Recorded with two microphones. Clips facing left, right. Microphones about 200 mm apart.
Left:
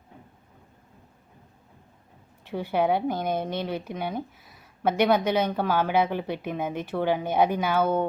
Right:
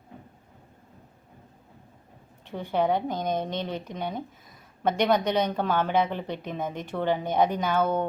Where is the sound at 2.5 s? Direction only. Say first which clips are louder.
Left 1 dB; 10° left (ahead or behind).